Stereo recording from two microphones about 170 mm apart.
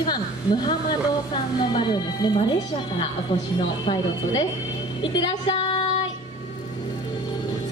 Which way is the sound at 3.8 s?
30° left (ahead or behind).